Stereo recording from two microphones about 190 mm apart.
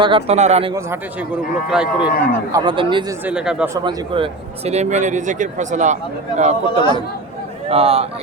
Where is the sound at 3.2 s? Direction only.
5° right (ahead or behind).